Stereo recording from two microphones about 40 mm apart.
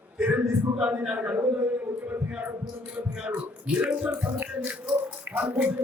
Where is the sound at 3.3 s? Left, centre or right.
Right.